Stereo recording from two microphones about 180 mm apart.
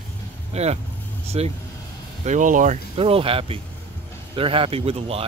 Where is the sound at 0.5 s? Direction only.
35° right (ahead or behind).